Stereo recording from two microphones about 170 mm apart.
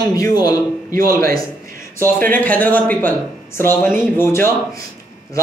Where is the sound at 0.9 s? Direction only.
60° right (ahead or behind).